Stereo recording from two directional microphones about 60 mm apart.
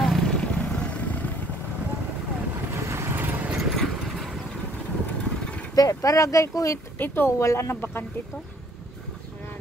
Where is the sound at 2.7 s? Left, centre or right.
Right.